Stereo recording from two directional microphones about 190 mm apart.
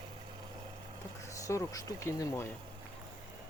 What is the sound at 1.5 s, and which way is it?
Speech, 15° left (ahead or behind).